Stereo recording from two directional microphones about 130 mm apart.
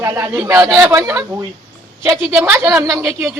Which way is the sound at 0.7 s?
5° right (ahead or behind).